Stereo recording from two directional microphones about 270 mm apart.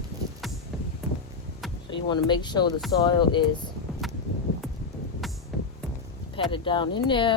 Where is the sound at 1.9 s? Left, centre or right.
Centre.